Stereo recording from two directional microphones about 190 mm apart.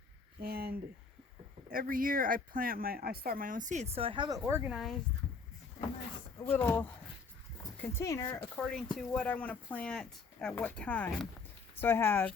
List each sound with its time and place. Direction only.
0.4 s speech: 55° right (ahead or behind); by 4.4 s 25° right (ahead or behind)
4.4 s speech: 10° right (ahead or behind)
6.4 s speech: 10° left (ahead or behind)
8.5 s speech: 5° left (ahead or behind)